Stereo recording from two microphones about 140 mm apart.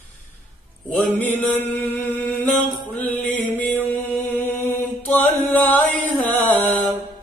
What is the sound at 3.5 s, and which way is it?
Music, 15° left (ahead or behind).